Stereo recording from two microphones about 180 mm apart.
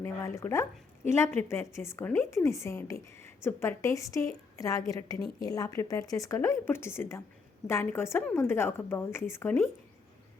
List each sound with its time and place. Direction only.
0.0 s a woman's voice: 15° left (ahead or behind)